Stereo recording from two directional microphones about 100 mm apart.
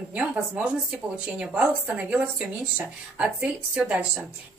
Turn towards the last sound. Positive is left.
turn(degrees=-10)  # may be behind; listen again after turning